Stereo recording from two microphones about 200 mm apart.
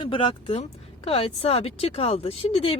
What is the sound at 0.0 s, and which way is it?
Speech, 25° left (ahead or behind).